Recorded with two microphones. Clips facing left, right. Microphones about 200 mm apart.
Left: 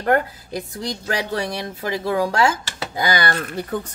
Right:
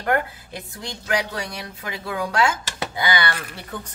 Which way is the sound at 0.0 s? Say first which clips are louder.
Left 4 dB; 40° left (ahead or behind).